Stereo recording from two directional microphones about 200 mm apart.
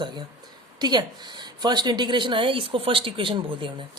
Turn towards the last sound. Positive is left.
turn(degrees=-25)  # may be behind; listen again after turning